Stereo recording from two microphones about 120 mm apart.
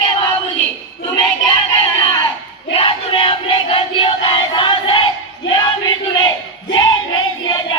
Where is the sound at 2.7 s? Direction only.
45° left (ahead or behind).